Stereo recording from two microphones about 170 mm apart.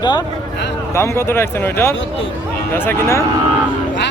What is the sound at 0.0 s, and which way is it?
Speech, 25° left (ahead or behind).